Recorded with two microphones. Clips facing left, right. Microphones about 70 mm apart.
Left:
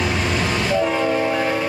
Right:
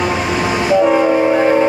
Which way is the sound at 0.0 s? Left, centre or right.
Centre.